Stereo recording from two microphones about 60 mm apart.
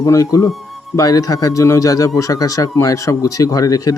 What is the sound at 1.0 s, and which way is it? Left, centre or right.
Speech, left.